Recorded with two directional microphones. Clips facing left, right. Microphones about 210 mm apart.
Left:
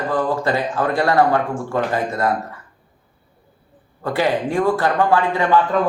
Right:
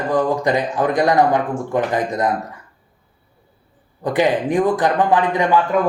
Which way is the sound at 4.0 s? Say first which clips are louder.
Right 2 dB; 15° right (ahead or behind).